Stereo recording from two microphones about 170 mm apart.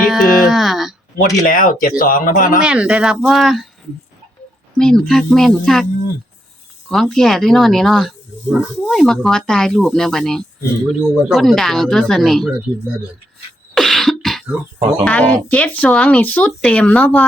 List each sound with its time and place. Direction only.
0.0 s music: centre (ahead or behind)
1.5 s speech: 55° left (ahead or behind)
2.6 s speech: 5° right (ahead or behind)
4.8 s speech: 5° left (ahead or behind)
6.8 s speech: centre (ahead or behind)
13.7 s throat clearing: centre (ahead or behind)
15.0 s speech: 5° left (ahead or behind)